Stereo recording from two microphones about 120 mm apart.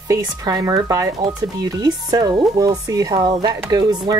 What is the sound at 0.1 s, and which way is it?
Speech, 30° right (ahead or behind).